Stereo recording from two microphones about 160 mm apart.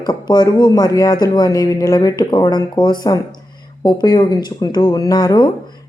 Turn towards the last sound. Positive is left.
turn(degrees=25)  # may be behind; listen again after turning